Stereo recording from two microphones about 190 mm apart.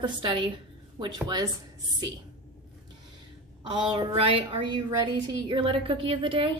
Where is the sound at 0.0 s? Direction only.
25° right (ahead or behind).